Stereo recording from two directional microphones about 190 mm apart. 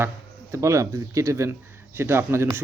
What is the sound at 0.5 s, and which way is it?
A man's voice, 15° right (ahead or behind).